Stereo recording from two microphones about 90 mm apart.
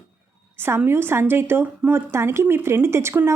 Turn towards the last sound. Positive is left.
turn(degrees=-30)  # may be behind; listen again after turning